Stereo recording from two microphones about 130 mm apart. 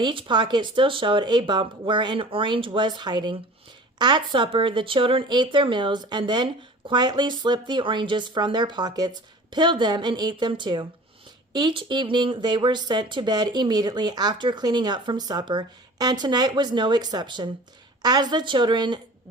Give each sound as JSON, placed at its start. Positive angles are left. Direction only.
{"t": 0.0, "sound": "speech", "side_deg": -40}